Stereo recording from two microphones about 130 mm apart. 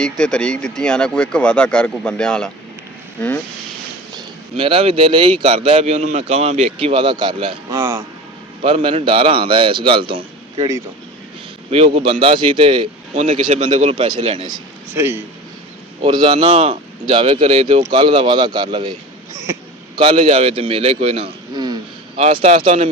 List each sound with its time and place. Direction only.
0.0 s a man's voice: 5° left (ahead or behind)
4.1 s speech: 45° right (ahead or behind)
11.7 s speech: 50° right (ahead or behind)
13.1 s speech: 55° right (ahead or behind)
14.9 s a man's voice: 20° right (ahead or behind)
16.0 s speech: 35° right (ahead or behind)
17.9 s speech: 40° right (ahead or behind)
20.0 s speech: 40° right (ahead or behind)
22.2 s speech: 50° right (ahead or behind)